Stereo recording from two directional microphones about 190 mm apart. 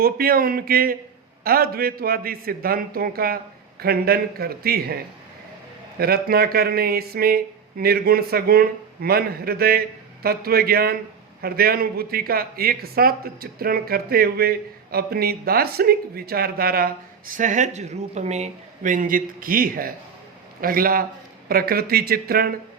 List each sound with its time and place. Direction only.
0.0 s speech: 50° right (ahead or behind)
6.0 s speech: 55° right (ahead or behind)